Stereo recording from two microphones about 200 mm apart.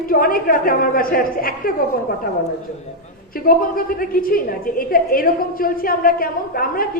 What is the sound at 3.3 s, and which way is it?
A man's voice, 45° left (ahead or behind).